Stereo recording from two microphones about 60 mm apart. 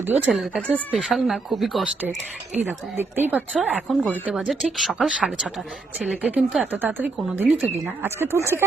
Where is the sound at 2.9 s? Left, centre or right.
Right.